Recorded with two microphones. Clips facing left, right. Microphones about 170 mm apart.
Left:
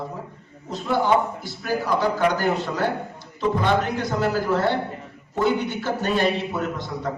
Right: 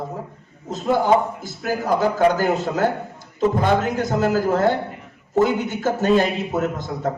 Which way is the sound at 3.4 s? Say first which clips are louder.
Right 3 dB; 45° right (ahead or behind).